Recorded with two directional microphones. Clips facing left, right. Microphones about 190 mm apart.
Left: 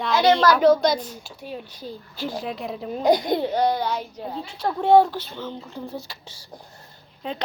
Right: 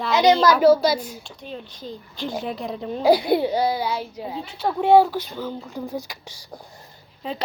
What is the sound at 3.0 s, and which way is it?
A child's voice, 5° right (ahead or behind).